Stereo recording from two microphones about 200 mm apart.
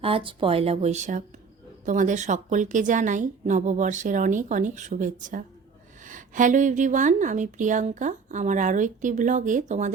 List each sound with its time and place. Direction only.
0.0 s a woman's voice: 25° right (ahead or behind)